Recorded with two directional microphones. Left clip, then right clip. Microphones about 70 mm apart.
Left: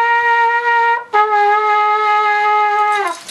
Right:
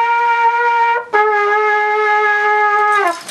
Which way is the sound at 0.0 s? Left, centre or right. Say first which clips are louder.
Even; centre.